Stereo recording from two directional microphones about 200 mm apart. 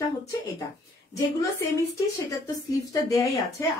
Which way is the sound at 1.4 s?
15° left (ahead or behind).